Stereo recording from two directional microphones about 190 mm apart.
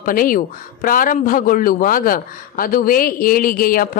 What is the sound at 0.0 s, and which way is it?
A woman's voice, 45° left (ahead or behind).